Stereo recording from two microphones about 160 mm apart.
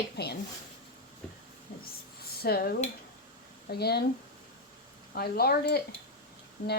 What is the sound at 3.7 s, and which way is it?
Speech, 85° left.